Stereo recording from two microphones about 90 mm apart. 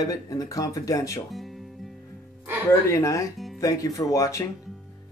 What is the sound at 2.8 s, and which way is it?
Speech, 35° left (ahead or behind).